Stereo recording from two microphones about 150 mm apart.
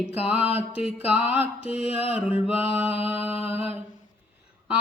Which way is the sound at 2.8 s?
40° left (ahead or behind).